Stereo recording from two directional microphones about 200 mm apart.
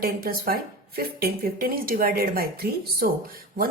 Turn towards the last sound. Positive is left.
turn(degrees=-50)  # may be behind; listen again after turning